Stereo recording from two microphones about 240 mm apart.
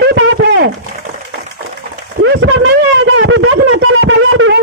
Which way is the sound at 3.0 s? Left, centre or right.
Right.